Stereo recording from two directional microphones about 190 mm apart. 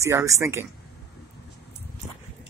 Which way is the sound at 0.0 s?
15° right (ahead or behind).